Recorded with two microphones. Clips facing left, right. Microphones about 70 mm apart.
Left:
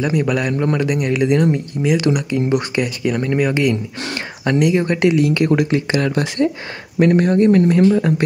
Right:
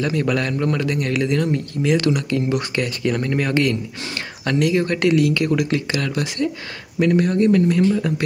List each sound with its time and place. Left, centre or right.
0.0 s speech: centre